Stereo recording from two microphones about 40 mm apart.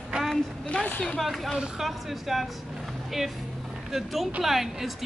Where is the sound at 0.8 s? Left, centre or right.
Left.